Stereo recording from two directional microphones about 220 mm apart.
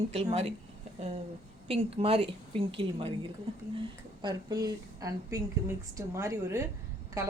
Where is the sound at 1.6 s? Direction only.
25° right (ahead or behind).